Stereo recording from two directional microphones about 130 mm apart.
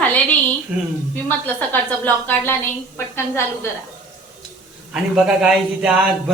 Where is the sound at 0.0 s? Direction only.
10° left (ahead or behind).